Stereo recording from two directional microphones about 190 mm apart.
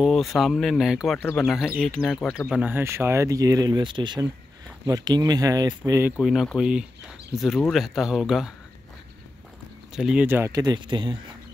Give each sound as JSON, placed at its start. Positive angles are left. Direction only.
{"t": 0.0, "sound": "speech", "side_deg": 0}
{"t": 9.9, "sound": "speech", "side_deg": -5}